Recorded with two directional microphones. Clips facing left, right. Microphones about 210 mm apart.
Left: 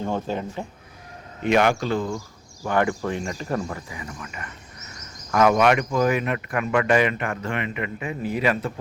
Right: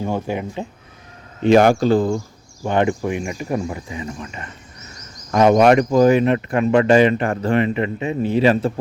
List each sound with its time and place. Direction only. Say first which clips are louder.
0.0 s speech: right 3 dB; 10° right (ahead or behind)
1.4 s speech: right 7 dB; 35° right (ahead or behind)
2.6 s speech: right 4 dB; 20° right (ahead or behind)